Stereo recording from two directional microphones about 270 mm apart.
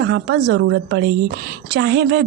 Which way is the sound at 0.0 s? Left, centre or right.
Right.